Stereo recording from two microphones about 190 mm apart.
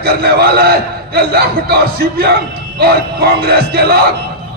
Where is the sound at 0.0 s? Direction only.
55° right (ahead or behind).